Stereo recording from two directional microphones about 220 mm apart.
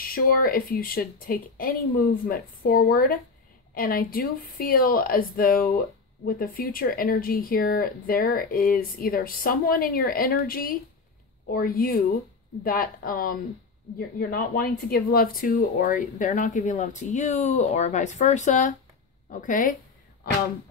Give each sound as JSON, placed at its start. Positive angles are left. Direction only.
{"t": 0.0, "sound": "speech", "side_deg": 40}